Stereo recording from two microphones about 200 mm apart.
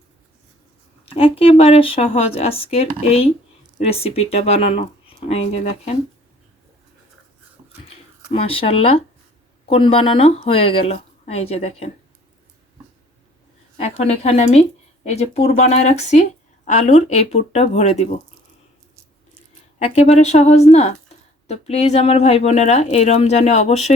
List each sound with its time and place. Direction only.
1.0 s speech: 30° left (ahead or behind)
8.3 s speech: 30° left (ahead or behind)
13.7 s speech: 35° left (ahead or behind)
19.8 s speech: 35° left (ahead or behind)